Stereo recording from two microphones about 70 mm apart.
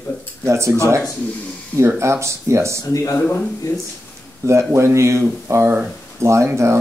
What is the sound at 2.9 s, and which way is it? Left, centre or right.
Speech, left.